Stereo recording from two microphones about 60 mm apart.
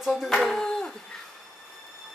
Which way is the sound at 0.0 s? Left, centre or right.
Centre.